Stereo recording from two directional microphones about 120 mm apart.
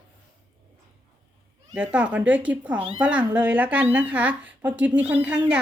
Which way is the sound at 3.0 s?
10° right (ahead or behind).